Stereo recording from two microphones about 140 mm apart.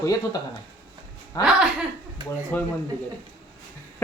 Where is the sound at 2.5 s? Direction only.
10° left (ahead or behind).